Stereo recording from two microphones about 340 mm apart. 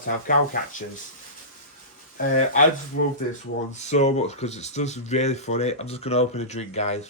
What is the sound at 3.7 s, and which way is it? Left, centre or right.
Speech, centre.